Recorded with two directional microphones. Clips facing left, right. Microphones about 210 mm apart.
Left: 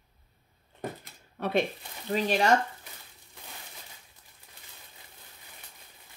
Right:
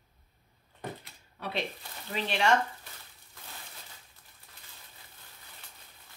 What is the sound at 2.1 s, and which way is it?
Speech, 40° left (ahead or behind).